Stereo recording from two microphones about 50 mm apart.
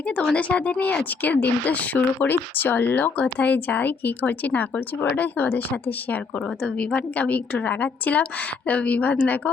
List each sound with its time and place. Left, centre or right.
0.3 s a woman's voice: left
1.2 s speech: left
6.7 s a woman's voice: left